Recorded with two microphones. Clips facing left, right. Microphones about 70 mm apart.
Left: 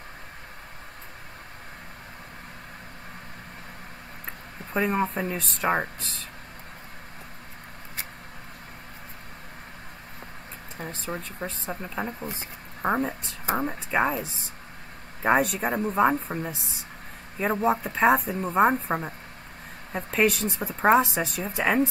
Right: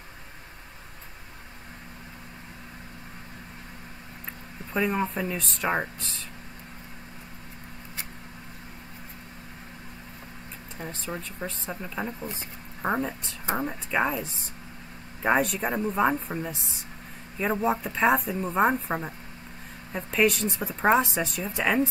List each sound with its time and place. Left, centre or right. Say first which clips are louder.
4.7 s speech: left 1 dB; left
10.8 s a sound: left 1 dB; left
11.3 s speech: left 1 dB; centre
15.2 s speech: left 1 dB; centre
20.0 s speech: even; left
20.2 s speech: even; centre